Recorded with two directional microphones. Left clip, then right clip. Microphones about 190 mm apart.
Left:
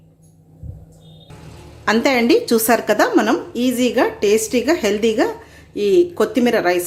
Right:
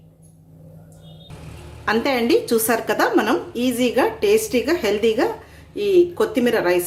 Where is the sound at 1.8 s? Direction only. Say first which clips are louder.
Left 4 dB; 25° left (ahead or behind).